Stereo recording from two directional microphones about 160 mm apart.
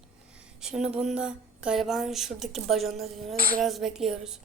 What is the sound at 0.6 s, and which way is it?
Speech, 5° right (ahead or behind).